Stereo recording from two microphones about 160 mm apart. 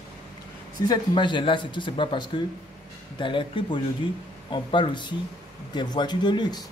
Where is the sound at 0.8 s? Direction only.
25° left (ahead or behind).